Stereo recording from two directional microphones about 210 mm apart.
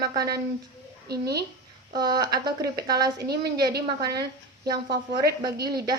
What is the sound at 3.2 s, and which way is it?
A woman's voice, 50° right (ahead or behind).